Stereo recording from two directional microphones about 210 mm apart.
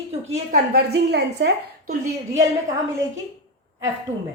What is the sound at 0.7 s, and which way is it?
A woman's voice, 50° right (ahead or behind).